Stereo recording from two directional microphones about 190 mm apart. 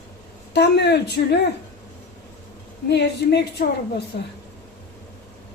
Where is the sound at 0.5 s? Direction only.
60° left (ahead or behind).